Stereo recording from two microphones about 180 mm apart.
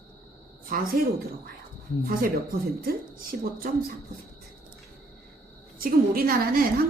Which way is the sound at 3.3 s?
55° right (ahead or behind).